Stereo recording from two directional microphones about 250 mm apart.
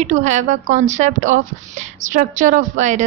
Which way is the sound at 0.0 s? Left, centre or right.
Right.